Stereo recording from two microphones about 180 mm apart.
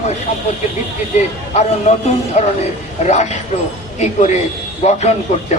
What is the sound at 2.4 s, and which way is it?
A man's voice, 40° left (ahead or behind).